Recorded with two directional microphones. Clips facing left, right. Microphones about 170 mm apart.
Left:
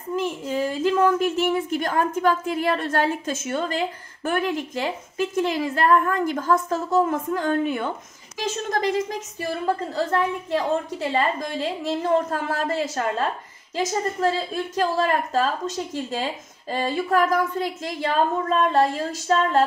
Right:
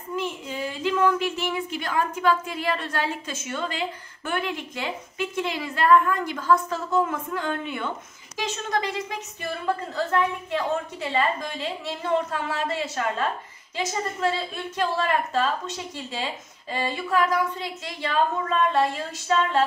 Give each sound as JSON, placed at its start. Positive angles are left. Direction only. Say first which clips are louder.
{"t": 0.1, "sound": "a woman's voice", "louder": "left 5 dB", "side_deg": 40}